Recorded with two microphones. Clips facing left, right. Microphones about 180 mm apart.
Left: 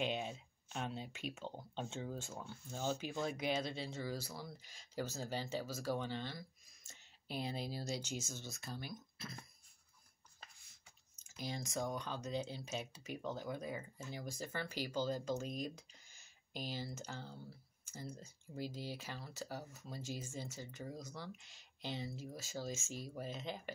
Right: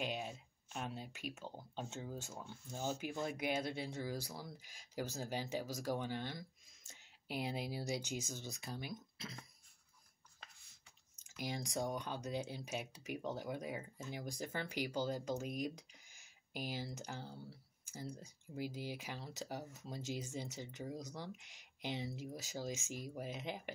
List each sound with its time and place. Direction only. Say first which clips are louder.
0.0 s speech: left 3 dB; 5° right (ahead or behind)
11.1 s speech: right 1 dB; 15° right (ahead or behind)